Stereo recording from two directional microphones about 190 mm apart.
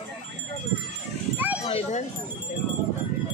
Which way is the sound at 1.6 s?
30° left (ahead or behind).